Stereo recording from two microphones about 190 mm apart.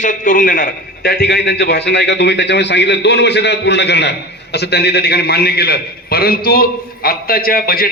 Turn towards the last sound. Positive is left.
turn(degrees=50)  # may be behind; listen again after turning